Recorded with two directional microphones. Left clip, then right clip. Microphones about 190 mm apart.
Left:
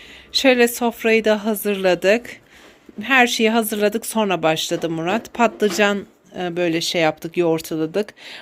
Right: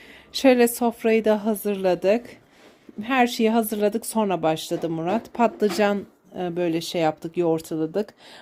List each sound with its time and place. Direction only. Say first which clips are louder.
0.3 s speech: left 3 dB; 15° right (ahead or behind)